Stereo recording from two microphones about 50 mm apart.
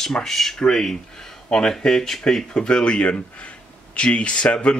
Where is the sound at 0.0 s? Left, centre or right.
Centre.